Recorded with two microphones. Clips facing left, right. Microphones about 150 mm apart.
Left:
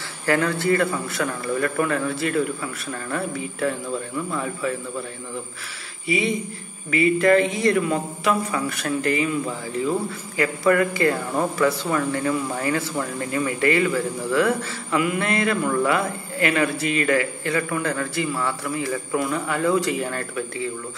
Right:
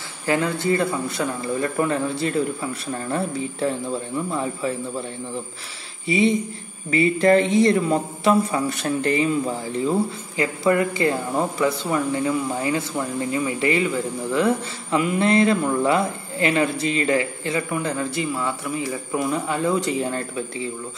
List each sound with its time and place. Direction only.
0.3 s speech: 20° right (ahead or behind)
6.0 s speech: 30° right (ahead or behind)